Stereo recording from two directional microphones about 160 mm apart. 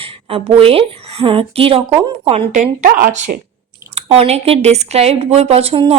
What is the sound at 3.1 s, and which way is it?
A woman's voice, 45° right (ahead or behind).